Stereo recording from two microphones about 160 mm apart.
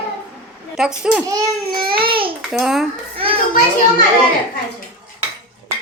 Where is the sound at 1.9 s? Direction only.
35° right (ahead or behind).